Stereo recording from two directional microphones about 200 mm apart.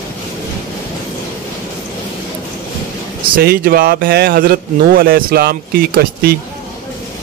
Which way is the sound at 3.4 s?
50° right (ahead or behind).